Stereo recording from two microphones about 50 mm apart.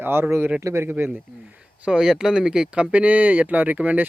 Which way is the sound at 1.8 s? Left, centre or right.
Centre.